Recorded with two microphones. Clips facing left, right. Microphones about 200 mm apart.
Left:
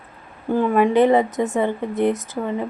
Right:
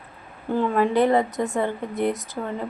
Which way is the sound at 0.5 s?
15° left (ahead or behind).